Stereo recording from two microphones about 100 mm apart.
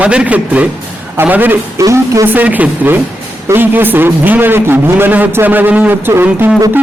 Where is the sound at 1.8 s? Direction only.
30° right (ahead or behind).